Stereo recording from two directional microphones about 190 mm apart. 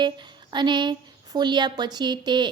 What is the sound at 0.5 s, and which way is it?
A woman's voice, 25° right (ahead or behind).